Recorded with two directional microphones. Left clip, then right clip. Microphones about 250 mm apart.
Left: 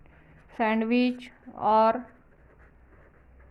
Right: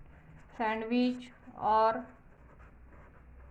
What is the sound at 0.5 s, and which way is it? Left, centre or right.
A woman's voice, left.